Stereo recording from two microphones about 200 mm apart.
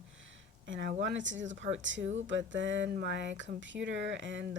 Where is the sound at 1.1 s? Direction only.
65° right (ahead or behind).